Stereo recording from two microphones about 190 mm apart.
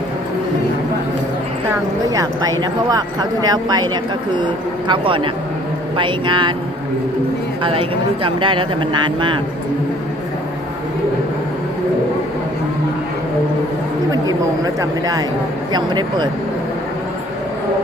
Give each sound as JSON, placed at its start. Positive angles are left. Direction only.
{"t": 2.0, "sound": "speech", "side_deg": -20}
{"t": 7.6, "sound": "speech", "side_deg": -30}
{"t": 14.1, "sound": "speech", "side_deg": -20}